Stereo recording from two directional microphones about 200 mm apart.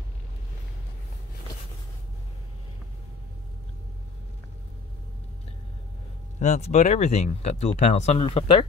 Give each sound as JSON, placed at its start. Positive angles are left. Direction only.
{"t": 6.4, "sound": "speech", "side_deg": 35}